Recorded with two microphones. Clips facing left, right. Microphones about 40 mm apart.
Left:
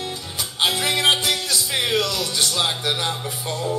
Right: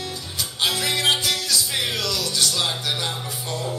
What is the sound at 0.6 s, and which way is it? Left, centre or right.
Music, centre.